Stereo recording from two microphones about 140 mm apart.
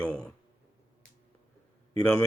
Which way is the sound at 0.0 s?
10° left (ahead or behind).